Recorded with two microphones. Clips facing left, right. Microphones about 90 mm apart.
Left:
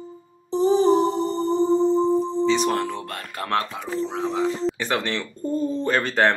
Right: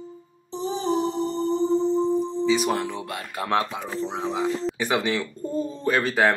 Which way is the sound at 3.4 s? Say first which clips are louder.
Right 1 dB; 15° right (ahead or behind).